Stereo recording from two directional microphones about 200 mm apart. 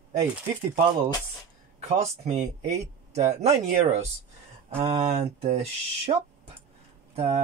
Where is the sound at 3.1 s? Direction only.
35° right (ahead or behind).